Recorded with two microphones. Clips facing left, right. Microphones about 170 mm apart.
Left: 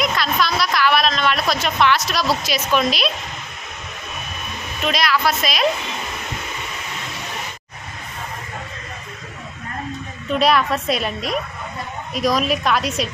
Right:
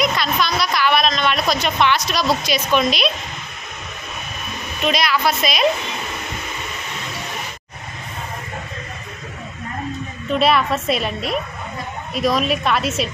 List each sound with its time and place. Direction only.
0.0 s a sound: centre (ahead or behind)
4.8 s a woman's voice: centre (ahead or behind)
10.3 s a woman's voice: centre (ahead or behind)